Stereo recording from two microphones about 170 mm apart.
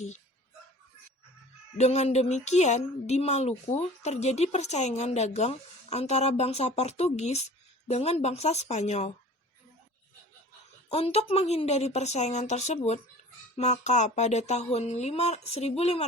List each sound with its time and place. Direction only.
1.8 s a woman's voice: 40° left (ahead or behind)
10.8 s a woman's voice: 35° left (ahead or behind)